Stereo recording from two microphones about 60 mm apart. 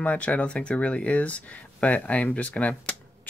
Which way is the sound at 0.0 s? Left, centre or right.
Left.